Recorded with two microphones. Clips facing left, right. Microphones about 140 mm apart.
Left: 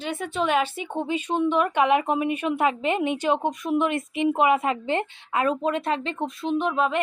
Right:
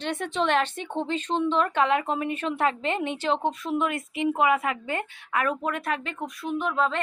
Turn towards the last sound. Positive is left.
turn(degrees=15)  # may be behind; listen again after turning